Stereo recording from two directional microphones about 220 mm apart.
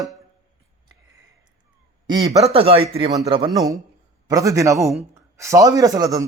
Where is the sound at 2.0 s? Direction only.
20° right (ahead or behind).